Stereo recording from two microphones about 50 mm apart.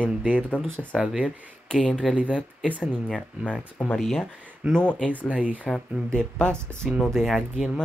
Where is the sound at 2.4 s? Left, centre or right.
Left.